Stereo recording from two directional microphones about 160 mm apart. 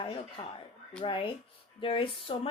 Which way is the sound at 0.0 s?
30° left (ahead or behind).